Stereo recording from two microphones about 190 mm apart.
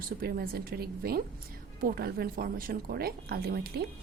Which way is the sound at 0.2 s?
55° right (ahead or behind).